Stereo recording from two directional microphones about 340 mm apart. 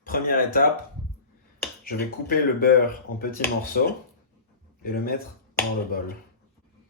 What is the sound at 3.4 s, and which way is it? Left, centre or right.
Speech, left.